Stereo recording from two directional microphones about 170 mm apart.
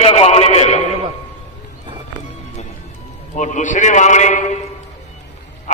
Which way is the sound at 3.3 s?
45° left (ahead or behind).